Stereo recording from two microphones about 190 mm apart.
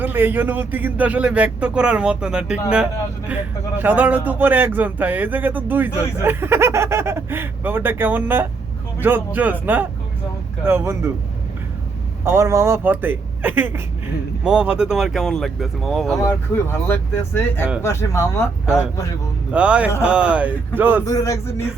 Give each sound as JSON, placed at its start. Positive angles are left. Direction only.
{"t": 0.0, "sound": "speech", "side_deg": -10}
{"t": 12.2, "sound": "speech", "side_deg": -15}
{"t": 16.2, "sound": "speech", "side_deg": 10}
{"t": 19.5, "sound": "speech", "side_deg": -5}
{"t": 21.0, "sound": "speech", "side_deg": 15}